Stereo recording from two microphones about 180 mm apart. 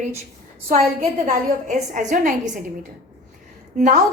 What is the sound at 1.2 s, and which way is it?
A woman's voice, 45° right (ahead or behind).